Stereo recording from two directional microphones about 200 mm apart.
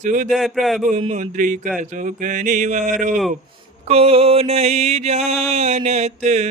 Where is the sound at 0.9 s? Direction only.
35° right (ahead or behind).